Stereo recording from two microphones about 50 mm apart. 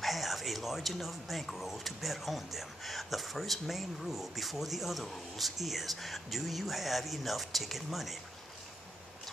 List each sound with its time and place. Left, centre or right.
0.0 s speech: centre